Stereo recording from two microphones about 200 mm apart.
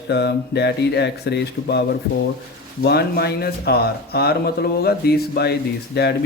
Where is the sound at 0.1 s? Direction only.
55° left (ahead or behind).